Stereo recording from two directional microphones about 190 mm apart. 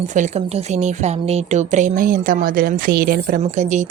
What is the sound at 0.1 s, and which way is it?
A woman's voice, 35° right (ahead or behind).